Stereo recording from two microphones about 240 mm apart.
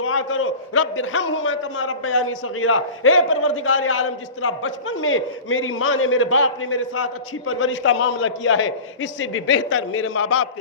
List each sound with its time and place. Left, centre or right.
0.0 s a man's voice: left